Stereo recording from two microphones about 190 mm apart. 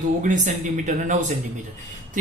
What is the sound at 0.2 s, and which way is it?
A man's voice, 40° right (ahead or behind).